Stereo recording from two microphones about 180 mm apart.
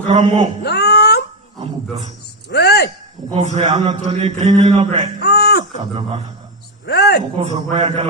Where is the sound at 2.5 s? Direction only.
65° left (ahead or behind).